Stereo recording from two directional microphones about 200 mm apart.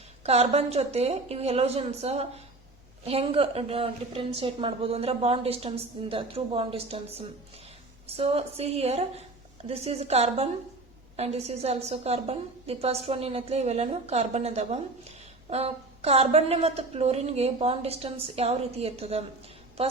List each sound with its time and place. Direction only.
0.3 s a woman's voice: 30° right (ahead or behind)